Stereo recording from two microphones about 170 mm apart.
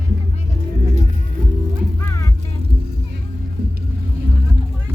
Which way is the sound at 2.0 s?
20° left (ahead or behind).